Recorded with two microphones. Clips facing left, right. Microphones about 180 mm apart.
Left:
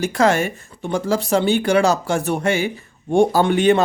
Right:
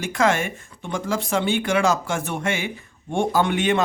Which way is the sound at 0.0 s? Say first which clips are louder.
Left 4 dB; 35° left (ahead or behind).